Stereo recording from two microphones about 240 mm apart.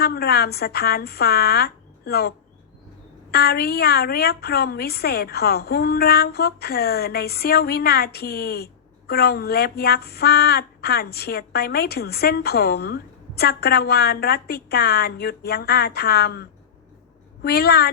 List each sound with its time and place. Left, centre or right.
0.0 s speech: left
3.3 s speech: left